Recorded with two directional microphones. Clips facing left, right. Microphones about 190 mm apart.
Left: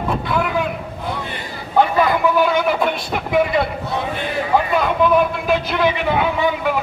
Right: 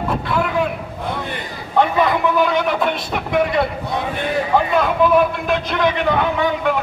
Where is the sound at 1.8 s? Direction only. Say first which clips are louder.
Left 1 dB; 5° left (ahead or behind).